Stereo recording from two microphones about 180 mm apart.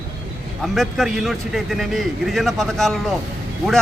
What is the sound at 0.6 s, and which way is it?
Speech, centre (ahead or behind).